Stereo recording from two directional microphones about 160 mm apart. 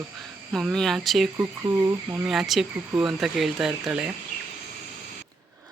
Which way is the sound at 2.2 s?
Centre (ahead or behind).